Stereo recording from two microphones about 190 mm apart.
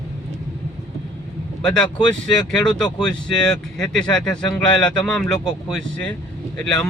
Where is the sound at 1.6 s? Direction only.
5° left (ahead or behind).